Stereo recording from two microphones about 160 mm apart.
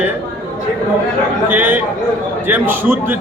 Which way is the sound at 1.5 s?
10° right (ahead or behind).